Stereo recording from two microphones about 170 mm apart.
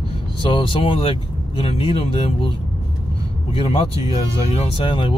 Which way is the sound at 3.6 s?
35° left (ahead or behind).